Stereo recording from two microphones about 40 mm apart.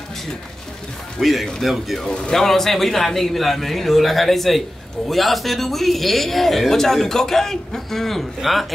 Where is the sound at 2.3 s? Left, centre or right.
Centre.